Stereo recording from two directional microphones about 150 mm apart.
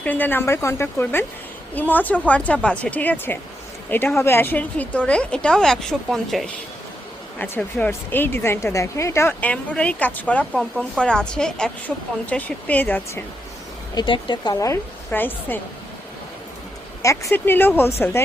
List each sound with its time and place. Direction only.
0.0 s speech: 10° left (ahead or behind)
7.3 s speech: 15° left (ahead or behind)
13.9 s a woman's voice: 35° left (ahead or behind); by 15.6 s 10° left (ahead or behind)
17.0 s speech: 20° left (ahead or behind)